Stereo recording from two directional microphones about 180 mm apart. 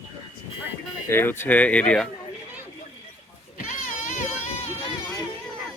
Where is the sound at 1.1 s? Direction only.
10° left (ahead or behind).